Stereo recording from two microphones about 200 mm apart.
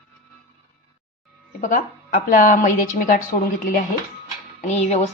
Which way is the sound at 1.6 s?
40° left (ahead or behind).